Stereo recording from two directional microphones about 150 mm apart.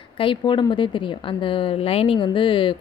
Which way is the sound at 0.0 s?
35° left (ahead or behind).